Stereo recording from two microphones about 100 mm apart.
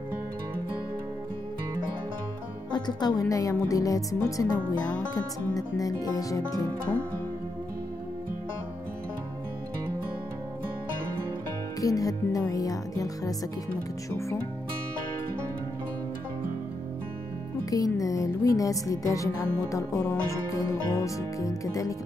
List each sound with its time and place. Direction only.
2.7 s speech: 45° left (ahead or behind)
11.8 s speech: 35° left (ahead or behind)
17.6 s speech: 35° left (ahead or behind)